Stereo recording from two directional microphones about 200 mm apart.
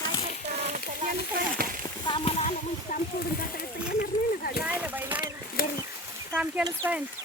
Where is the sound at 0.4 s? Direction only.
35° right (ahead or behind).